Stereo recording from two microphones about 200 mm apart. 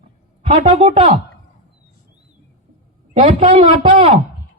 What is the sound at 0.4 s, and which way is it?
Speech, 30° right (ahead or behind).